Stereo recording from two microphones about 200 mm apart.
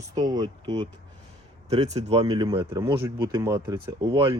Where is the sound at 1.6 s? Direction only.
35° right (ahead or behind).